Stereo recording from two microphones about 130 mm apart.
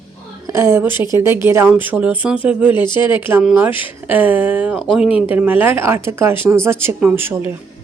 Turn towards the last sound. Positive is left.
turn(degrees=-15)  # may be behind; listen again after turning